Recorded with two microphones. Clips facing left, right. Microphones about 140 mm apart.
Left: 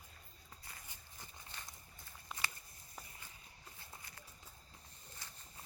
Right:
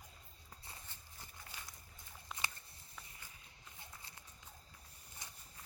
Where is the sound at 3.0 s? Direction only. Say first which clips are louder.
Left 3 dB; 40° left (ahead or behind).